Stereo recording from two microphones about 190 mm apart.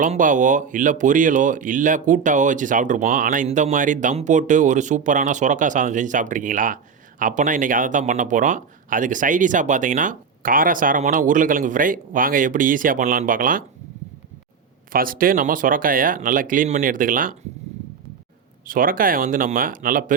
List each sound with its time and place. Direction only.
0.0 s speech: 45° right (ahead or behind)
14.9 s speech: 50° right (ahead or behind)
18.7 s speech: 45° right (ahead or behind)